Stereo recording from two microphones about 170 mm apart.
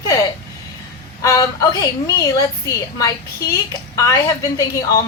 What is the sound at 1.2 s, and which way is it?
A woman's voice, 20° left (ahead or behind).